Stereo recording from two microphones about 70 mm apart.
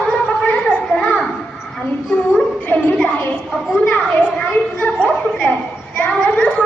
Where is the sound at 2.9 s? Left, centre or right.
Centre.